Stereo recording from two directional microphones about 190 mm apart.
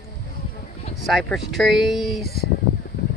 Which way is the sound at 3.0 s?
60° left (ahead or behind).